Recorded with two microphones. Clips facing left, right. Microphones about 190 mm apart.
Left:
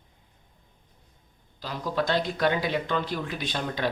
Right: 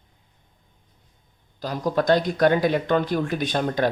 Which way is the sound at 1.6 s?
45° right (ahead or behind).